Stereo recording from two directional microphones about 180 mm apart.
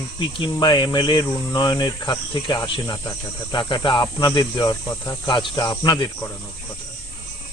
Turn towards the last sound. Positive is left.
turn(degrees=25)  # may be behind; listen again after turning